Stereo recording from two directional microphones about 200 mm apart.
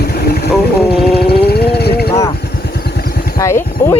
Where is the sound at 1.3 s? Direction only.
50° left (ahead or behind).